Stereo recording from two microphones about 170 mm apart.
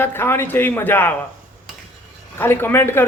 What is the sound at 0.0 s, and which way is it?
Speech, 15° left (ahead or behind).